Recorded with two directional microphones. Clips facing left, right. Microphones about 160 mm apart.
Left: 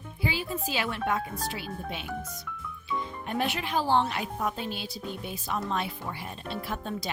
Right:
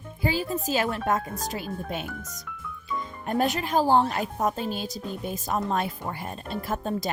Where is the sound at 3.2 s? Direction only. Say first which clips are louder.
Right 6 dB; 40° right (ahead or behind).